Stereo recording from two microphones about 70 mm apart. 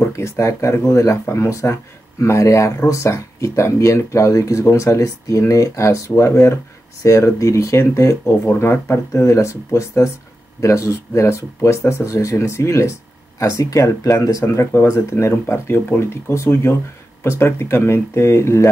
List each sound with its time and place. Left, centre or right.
0.0 s speech: left
8.5 s speech: left
14.7 s speech: left